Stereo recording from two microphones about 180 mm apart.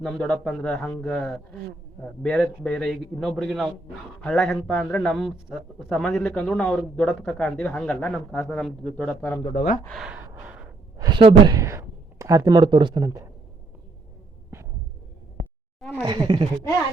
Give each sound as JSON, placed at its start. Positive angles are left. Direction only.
{"t": 0.0, "sound": "a man's voice", "side_deg": 0}
{"t": 9.8, "sound": "gasp", "side_deg": 0}
{"t": 10.9, "sound": "speech", "side_deg": -25}
{"t": 15.8, "sound": "speech", "side_deg": 0}
{"t": 16.0, "sound": "speech", "side_deg": -25}